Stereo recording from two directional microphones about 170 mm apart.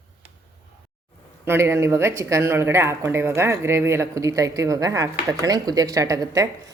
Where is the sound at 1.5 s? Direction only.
15° right (ahead or behind).